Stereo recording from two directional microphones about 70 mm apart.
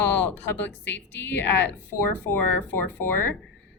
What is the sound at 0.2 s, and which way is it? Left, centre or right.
Speech, left.